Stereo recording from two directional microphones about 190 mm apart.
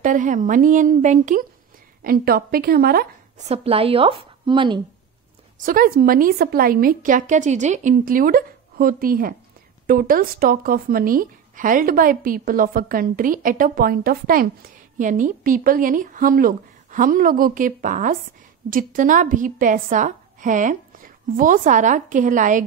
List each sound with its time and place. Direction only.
0.0 s a woman's voice: 40° right (ahead or behind)
2.0 s a woman's voice: 50° right (ahead or behind)
3.3 s speech: 35° right (ahead or behind)
5.7 s a woman's voice: 45° right (ahead or behind)